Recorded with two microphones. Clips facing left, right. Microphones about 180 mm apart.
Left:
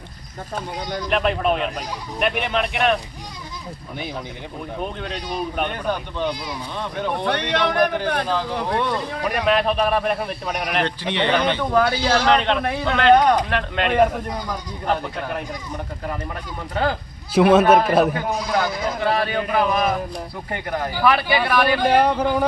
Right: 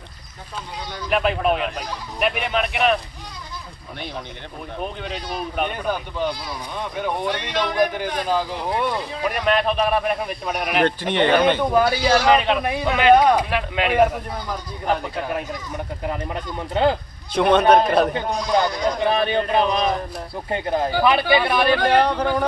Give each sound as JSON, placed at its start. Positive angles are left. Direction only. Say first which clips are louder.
{"t": 1.1, "sound": "speech", "louder": "right 1 dB", "side_deg": -5}
{"t": 4.8, "sound": "speech", "louder": "right 1 dB", "side_deg": 0}
{"t": 7.3, "sound": "a man's voice", "louder": "left 3 dB", "side_deg": 65}
{"t": 8.7, "sound": "speech", "louder": "right 1 dB", "side_deg": -5}
{"t": 10.8, "sound": "speech", "louder": "right 4 dB", "side_deg": -50}
{"t": 11.6, "sound": "a man's voice", "louder": "right 1 dB", "side_deg": -10}
{"t": 16.0, "sound": "speech", "louder": "right 3 dB", "side_deg": -20}
{"t": 17.3, "sound": "speech", "louder": "left 1 dB", "side_deg": 5}
{"t": 18.9, "sound": "speech", "louder": "even", "side_deg": -20}
{"t": 21.8, "sound": "speech", "louder": "left 1 dB", "side_deg": 10}